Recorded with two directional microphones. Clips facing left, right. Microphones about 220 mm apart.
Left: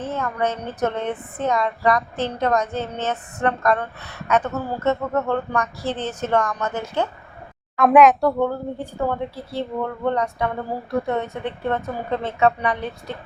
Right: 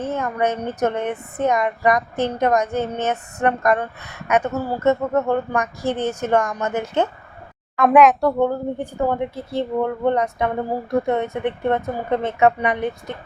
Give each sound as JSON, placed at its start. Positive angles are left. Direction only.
{"t": 0.1, "sound": "a woman's voice", "side_deg": -15}
{"t": 7.8, "sound": "speech", "side_deg": 0}
{"t": 8.4, "sound": "a woman's voice", "side_deg": -20}